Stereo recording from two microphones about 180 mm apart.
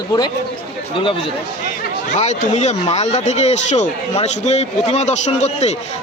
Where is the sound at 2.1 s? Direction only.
40° left (ahead or behind).